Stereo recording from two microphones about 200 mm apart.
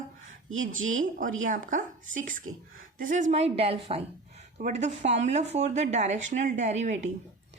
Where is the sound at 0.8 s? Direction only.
80° right.